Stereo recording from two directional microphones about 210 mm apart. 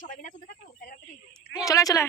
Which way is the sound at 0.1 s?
35° left (ahead or behind).